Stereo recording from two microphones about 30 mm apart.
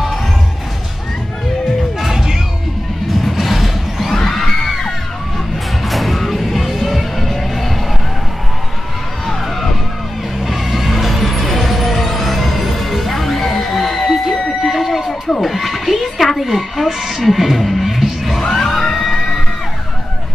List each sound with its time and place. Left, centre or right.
2.0 s music: centre
3.2 s music: centre
4.2 s children shouting: centre
5.9 s music: centre
9.2 s a sound: centre
10.4 s music: centre
14.6 s a sound: centre
17.6 s music: centre
17.8 s music: centre
18.4 s music: centre